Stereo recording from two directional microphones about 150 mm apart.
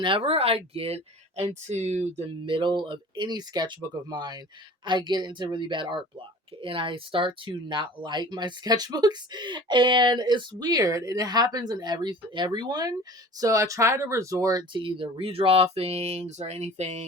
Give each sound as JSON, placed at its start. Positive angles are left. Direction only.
{"t": 0.0, "sound": "speech", "side_deg": -35}